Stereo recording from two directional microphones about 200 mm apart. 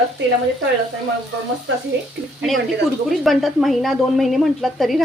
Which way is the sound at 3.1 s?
Centre (ahead or behind).